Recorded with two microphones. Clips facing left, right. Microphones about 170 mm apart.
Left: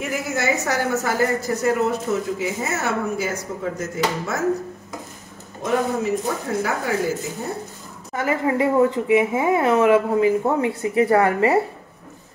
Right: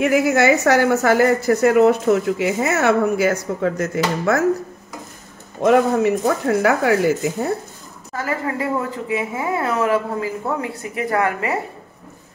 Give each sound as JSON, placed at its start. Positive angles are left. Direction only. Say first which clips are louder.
{"t": 0.0, "sound": "a woman's voice", "louder": "right 9 dB", "side_deg": -70}
{"t": 5.6, "sound": "a woman's voice", "louder": "right 7 dB", "side_deg": -75}
{"t": 8.1, "sound": "speech", "louder": "left 3 dB", "side_deg": 20}